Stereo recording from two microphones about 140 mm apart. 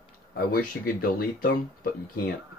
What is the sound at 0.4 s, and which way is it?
Speech, 90° left.